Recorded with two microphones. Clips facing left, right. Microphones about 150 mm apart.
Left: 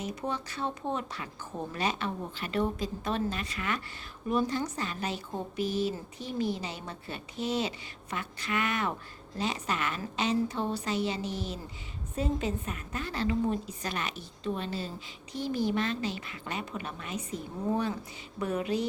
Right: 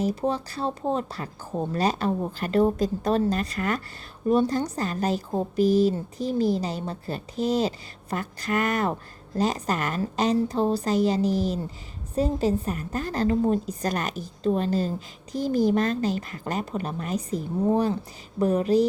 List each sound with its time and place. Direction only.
0.0 s a woman's voice: 35° right (ahead or behind)